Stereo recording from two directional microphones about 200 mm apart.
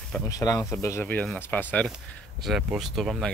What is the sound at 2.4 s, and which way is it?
Speech, centre (ahead or behind).